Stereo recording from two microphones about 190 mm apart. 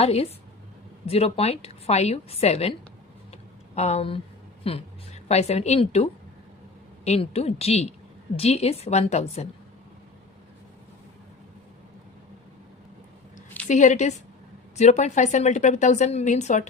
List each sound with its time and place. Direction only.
0.0 s a woman's voice: 35° left (ahead or behind)
3.8 s a woman's voice: 35° left (ahead or behind)
13.7 s a woman's voice: 40° left (ahead or behind)